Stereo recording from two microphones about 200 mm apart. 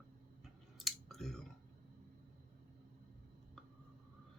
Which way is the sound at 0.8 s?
Centre (ahead or behind).